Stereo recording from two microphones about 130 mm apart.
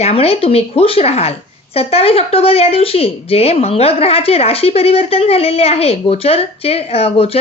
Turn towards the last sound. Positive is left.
turn(degrees=50)  # may be behind; listen again after turning